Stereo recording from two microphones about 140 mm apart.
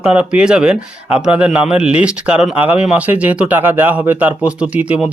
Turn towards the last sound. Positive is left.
turn(degrees=-10)  # may be behind; listen again after turning